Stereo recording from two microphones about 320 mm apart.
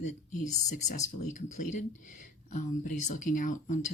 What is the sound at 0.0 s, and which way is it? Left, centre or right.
Speech, left.